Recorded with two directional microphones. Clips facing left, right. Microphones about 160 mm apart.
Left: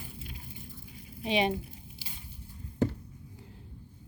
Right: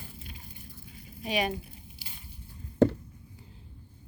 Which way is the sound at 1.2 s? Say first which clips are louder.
Left 2 dB; 25° left (ahead or behind).